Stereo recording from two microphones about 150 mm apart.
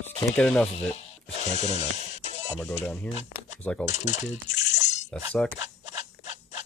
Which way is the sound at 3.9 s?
50° left (ahead or behind).